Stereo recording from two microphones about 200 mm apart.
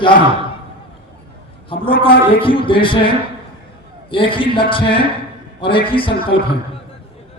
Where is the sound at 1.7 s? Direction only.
25° left (ahead or behind).